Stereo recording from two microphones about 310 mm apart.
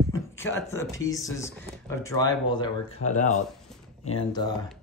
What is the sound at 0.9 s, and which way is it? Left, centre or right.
Speech, centre.